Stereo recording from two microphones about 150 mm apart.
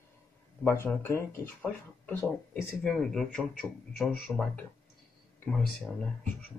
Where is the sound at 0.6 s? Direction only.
15° left (ahead or behind).